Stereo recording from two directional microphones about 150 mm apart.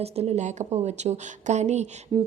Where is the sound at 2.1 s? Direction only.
30° right (ahead or behind).